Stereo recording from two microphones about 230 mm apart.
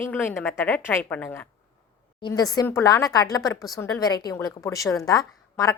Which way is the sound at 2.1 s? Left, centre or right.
Centre.